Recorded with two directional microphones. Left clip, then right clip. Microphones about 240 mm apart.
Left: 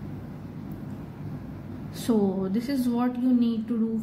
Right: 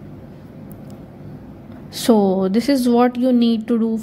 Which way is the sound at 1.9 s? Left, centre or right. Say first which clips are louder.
Right 11 dB; right.